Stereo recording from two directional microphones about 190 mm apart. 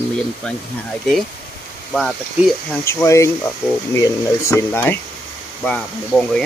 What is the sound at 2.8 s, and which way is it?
Speech, 15° left (ahead or behind).